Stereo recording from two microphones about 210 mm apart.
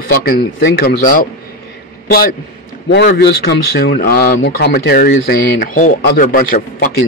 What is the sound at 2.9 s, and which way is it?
Speech, 50° left (ahead or behind).